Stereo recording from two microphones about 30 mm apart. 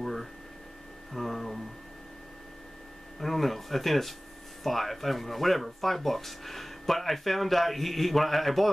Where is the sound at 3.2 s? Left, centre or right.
Centre.